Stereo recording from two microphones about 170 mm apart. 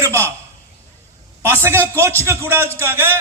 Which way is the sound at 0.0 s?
15° right (ahead or behind).